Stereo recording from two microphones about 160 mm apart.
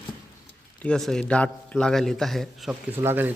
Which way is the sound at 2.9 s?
15° right (ahead or behind).